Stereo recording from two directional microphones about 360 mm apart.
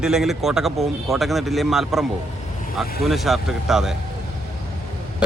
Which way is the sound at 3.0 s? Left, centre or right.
Centre.